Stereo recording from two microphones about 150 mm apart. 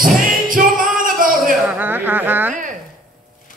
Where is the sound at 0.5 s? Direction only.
65° right (ahead or behind).